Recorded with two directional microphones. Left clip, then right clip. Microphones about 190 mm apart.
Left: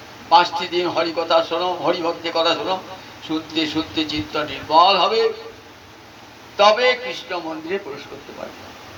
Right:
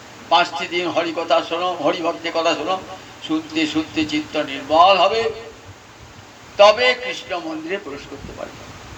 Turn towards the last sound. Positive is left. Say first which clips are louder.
# right 1 dB
turn(degrees=-40)  # may be behind; listen again after turning